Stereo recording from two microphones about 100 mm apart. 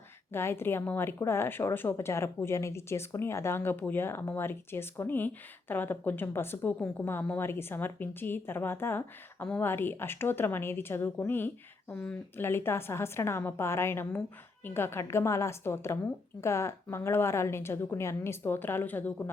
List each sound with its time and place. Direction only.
0.3 s a woman's voice: 25° left (ahead or behind)
11.9 s speech: 10° left (ahead or behind)
12.4 s a woman's voice: 25° left (ahead or behind)